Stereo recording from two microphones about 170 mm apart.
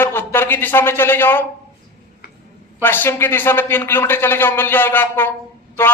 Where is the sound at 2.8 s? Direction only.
10° left (ahead or behind).